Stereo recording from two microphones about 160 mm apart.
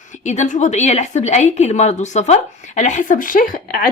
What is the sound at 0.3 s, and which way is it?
A woman's voice, 50° left (ahead or behind).